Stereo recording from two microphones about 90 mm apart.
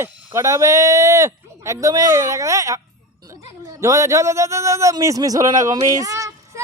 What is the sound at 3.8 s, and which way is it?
A man's voice, 35° right (ahead or behind).